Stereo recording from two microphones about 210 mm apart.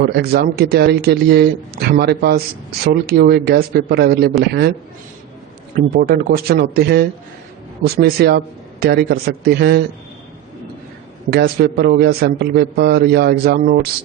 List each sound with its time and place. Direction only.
0.0 s a man's voice: 45° right (ahead or behind)
5.7 s a man's voice: 45° right (ahead or behind)
11.3 s a man's voice: 50° right (ahead or behind)